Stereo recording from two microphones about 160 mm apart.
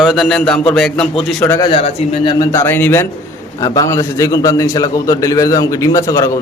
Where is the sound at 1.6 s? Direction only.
35° left (ahead or behind); by 3.0 s 10° left (ahead or behind).